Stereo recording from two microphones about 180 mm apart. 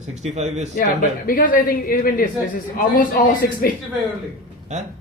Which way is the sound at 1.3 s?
50° left (ahead or behind).